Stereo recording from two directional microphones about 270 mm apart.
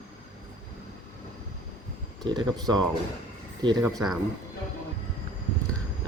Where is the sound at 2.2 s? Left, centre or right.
Centre.